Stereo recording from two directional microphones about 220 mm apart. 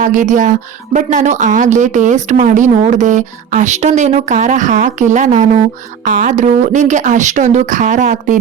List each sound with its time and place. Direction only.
0.0 s speech: 35° right (ahead or behind)